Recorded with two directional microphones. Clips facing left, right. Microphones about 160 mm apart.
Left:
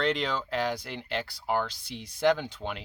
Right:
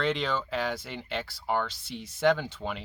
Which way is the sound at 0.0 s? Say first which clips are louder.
Even; centre (ahead or behind).